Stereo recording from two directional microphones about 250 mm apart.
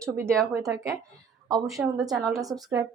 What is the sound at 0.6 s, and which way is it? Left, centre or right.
Speech, centre.